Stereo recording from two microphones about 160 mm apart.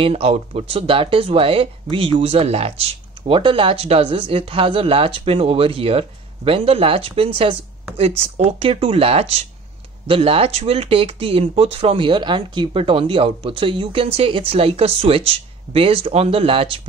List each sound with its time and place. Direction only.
0.0 s speech: 40° right (ahead or behind)